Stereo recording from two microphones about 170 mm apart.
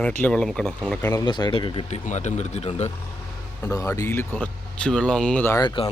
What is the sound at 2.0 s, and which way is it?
Speech, 45° left (ahead or behind).